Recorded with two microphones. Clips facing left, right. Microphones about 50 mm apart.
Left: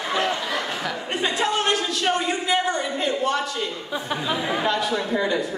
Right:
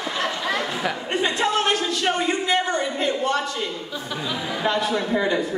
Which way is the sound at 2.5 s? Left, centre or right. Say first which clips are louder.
Right 1 dB; centre.